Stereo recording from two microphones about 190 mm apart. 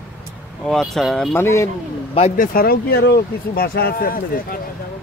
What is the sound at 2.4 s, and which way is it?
Speech, 50° left (ahead or behind).